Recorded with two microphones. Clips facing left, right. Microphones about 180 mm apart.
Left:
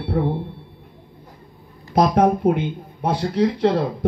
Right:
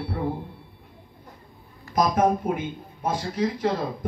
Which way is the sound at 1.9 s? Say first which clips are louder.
Left 5 dB; 65° left (ahead or behind).